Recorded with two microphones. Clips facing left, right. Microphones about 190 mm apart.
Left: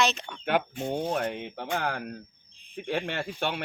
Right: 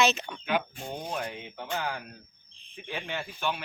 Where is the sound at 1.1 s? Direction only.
65° left (ahead or behind).